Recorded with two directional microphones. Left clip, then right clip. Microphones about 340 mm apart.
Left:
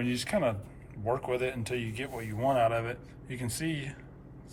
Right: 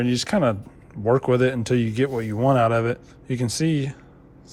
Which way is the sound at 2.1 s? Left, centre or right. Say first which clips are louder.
Right 6 dB; right.